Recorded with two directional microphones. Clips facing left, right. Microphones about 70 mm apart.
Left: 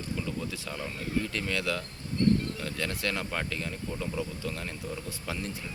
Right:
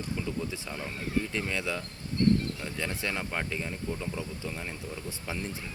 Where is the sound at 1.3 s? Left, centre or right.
Centre.